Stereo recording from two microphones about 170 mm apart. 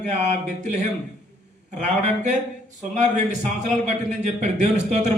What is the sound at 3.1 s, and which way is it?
Speech, 40° right (ahead or behind).